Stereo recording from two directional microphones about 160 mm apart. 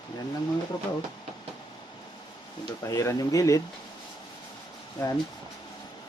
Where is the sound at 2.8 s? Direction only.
20° left (ahead or behind).